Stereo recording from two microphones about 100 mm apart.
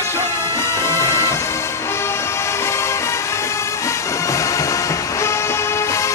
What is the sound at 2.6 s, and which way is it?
Music, 25° left (ahead or behind).